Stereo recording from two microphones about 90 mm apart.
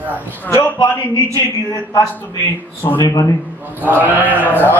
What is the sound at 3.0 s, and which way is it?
Speech, 45° left (ahead or behind).